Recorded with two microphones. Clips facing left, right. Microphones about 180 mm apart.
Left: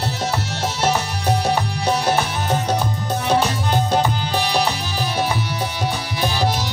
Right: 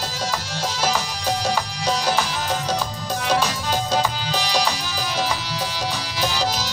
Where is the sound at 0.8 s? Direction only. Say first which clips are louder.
Left 4 dB; 60° left (ahead or behind).